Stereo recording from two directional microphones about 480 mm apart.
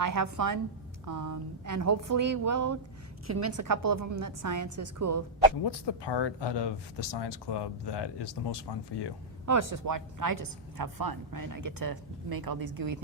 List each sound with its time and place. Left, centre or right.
0.0 s speech: right
5.6 s speech: left
9.5 s a woman's voice: right